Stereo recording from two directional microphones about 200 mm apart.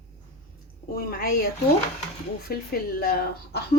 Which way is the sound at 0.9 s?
50° left (ahead or behind).